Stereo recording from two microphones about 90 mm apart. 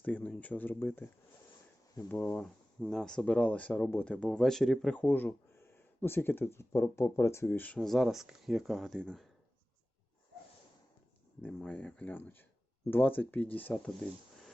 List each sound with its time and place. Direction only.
0.0 s speech: 15° left (ahead or behind)
2.0 s speech: 20° left (ahead or behind)
2.9 s speech: 5° left (ahead or behind)
4.9 s speech: 20° left (ahead or behind)
7.8 s speech: centre (ahead or behind)
11.4 s speech: 15° left (ahead or behind)